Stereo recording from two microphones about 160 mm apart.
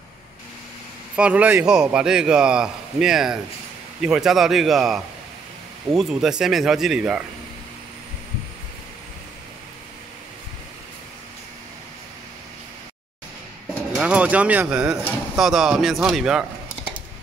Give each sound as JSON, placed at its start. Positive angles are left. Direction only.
{"t": 1.1, "sound": "speech", "side_deg": -10}
{"t": 13.9, "sound": "speech", "side_deg": -5}